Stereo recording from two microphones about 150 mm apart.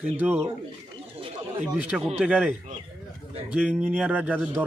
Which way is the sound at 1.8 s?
10° right (ahead or behind).